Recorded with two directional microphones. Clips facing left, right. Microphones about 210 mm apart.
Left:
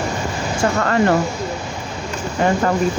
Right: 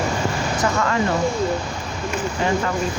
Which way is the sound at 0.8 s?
55° left (ahead or behind).